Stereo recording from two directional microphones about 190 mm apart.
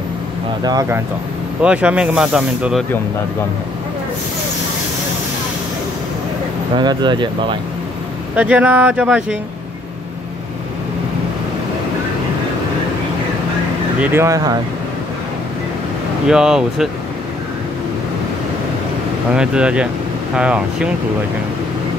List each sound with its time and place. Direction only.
0.7 s speech: 15° right (ahead or behind)
1.6 s speech: 5° right (ahead or behind)
6.8 s speech: 25° right (ahead or behind)
8.4 s speech: 5° right (ahead or behind)
14.0 s speech: 15° right (ahead or behind)
16.3 s speech: 5° right (ahead or behind)
19.3 s speech: 5° right (ahead or behind)